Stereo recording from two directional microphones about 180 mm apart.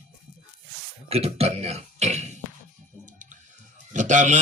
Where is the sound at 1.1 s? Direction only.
35° right (ahead or behind).